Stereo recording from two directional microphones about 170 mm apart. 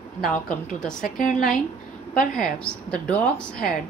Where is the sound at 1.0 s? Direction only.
55° left (ahead or behind).